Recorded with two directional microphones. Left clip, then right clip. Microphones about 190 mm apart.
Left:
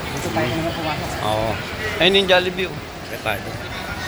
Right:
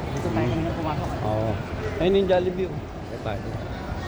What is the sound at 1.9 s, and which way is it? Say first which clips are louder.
Speech: left 6 dB; 10° right (ahead or behind).